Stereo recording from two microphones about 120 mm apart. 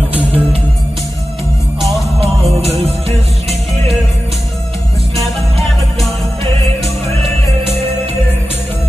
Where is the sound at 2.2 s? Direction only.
55° right (ahead or behind).